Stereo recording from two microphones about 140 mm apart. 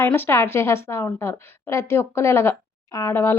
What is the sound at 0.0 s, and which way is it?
A woman's voice, 15° left (ahead or behind).